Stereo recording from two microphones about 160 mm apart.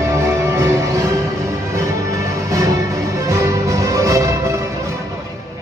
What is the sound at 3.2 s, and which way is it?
Music, 20° right (ahead or behind).